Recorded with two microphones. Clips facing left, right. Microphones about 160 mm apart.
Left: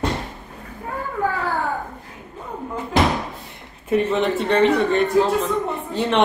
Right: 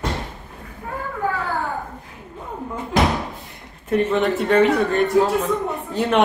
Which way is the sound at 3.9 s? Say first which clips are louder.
Even; centre (ahead or behind).